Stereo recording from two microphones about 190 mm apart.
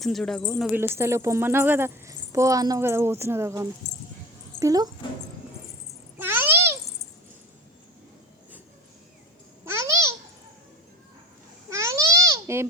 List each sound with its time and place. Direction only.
0.0 s speech: centre (ahead or behind)
0.7 s speech: 15° right (ahead or behind)
6.1 s a sound: 10° right (ahead or behind)
9.6 s babbling: 15° right (ahead or behind)
11.7 s babbling: 15° right (ahead or behind)